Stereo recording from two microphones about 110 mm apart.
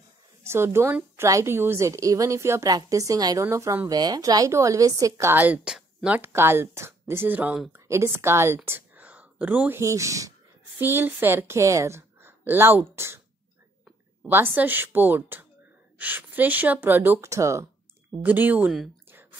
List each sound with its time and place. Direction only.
0.4 s a woman's voice: 25° right (ahead or behind)
5.3 s speech: 15° right (ahead or behind)
6.0 s a woman's voice: 15° right (ahead or behind)
8.6 s whispering: 15° right (ahead or behind)
9.8 s a woman's voice: 30° right (ahead or behind)
18.2 s speech: 15° right (ahead or behind)